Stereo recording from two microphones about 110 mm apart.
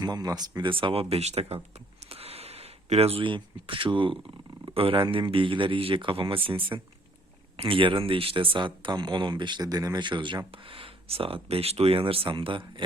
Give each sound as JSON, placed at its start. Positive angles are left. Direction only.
{"t": 0.0, "sound": "speech", "side_deg": -40}
{"t": 1.1, "sound": "speech", "side_deg": -75}
{"t": 2.0, "sound": "a sound", "side_deg": -65}
{"t": 4.7, "sound": "speech", "side_deg": -55}